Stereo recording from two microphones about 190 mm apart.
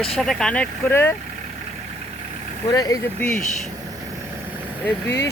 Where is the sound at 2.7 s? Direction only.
20° left (ahead or behind).